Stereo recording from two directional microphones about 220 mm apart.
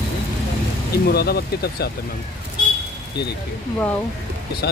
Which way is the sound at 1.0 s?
45° left (ahead or behind).